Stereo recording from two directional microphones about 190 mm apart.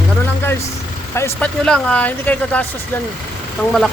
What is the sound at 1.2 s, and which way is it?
Speech, 5° left (ahead or behind).